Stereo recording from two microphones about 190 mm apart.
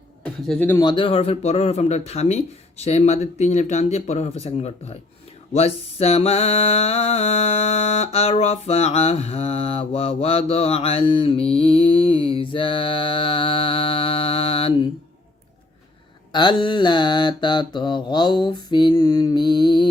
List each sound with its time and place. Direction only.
0.2 s a sound: 5° left (ahead or behind)
0.7 s mantra: 20° left (ahead or behind)
16.3 s mantra: 25° left (ahead or behind)